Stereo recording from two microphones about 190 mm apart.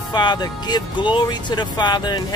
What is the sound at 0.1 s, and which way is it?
Music, 25° left (ahead or behind).